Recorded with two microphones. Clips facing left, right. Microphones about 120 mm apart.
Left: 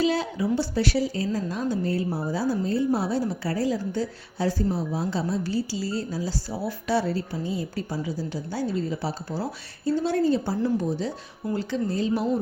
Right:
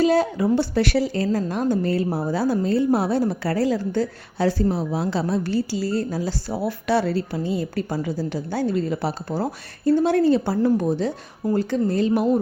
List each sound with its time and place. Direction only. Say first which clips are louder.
0.0 s a woman's voice: right 6 dB; 45° right (ahead or behind)